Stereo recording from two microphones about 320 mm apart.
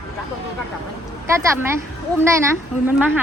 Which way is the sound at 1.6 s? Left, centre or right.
Centre.